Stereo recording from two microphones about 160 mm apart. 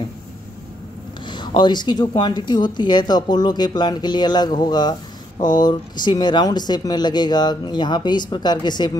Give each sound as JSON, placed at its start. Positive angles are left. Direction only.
{"t": 1.2, "sound": "speech", "side_deg": 30}